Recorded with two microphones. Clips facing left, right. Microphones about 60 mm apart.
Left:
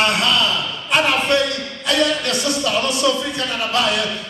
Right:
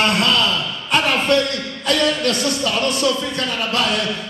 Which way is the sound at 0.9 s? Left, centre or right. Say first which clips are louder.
Even; left.